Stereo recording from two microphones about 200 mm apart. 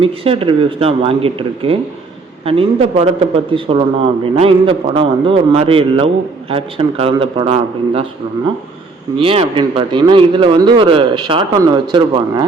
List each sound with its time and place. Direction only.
0.0 s speech: 25° right (ahead or behind)
9.1 s speech: 30° right (ahead or behind)